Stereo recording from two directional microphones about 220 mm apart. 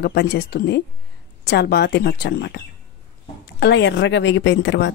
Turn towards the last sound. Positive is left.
turn(degrees=55)  # may be behind; listen again after turning